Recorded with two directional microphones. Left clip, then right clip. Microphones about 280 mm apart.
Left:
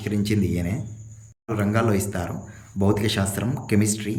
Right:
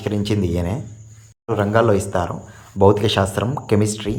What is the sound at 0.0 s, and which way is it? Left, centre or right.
Speech, centre.